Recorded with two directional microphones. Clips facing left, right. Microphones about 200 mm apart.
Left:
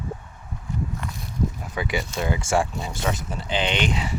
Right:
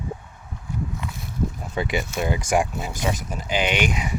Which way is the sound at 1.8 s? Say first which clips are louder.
Right 2 dB; 20° right (ahead or behind).